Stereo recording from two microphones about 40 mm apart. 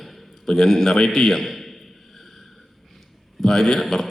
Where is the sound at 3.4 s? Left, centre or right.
Centre.